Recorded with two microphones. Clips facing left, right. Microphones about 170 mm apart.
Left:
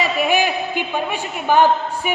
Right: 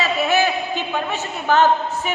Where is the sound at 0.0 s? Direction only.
15° left (ahead or behind).